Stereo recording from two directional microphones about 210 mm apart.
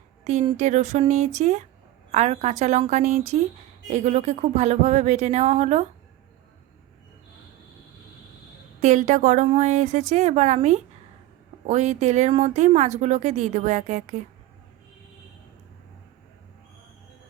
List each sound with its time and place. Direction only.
0.3 s speech: 30° right (ahead or behind)
8.8 s speech: 35° right (ahead or behind)